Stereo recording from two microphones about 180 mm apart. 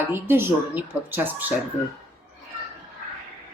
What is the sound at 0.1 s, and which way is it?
A woman's voice, 10° right (ahead or behind).